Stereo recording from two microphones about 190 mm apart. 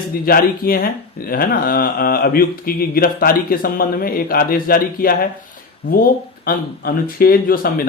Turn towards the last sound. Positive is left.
turn(degrees=50)  # may be behind; listen again after turning